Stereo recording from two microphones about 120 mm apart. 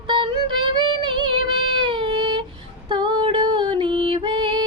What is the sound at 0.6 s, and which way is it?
Music, 45° right (ahead or behind).